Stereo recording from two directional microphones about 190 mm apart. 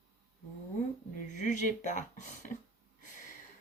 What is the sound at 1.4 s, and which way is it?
Speech, 40° left (ahead or behind).